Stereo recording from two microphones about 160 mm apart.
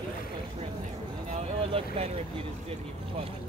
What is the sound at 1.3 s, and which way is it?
Speech, 35° right (ahead or behind).